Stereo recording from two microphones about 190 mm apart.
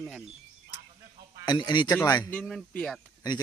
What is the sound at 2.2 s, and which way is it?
Speech, 5° left (ahead or behind).